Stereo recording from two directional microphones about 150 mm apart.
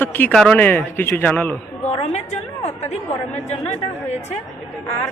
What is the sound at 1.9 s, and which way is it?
A woman's voice, 45° left (ahead or behind).